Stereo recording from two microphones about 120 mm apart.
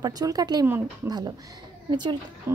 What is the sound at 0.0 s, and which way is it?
A woman's voice, 30° right (ahead or behind).